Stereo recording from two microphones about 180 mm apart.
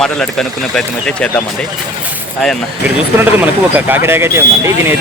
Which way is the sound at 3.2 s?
10° right (ahead or behind).